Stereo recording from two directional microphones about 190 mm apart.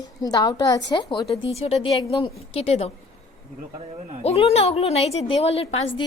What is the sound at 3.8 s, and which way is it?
Speech, 35° right (ahead or behind).